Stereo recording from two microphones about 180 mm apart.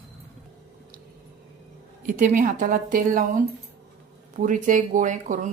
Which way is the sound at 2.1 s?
45° right (ahead or behind).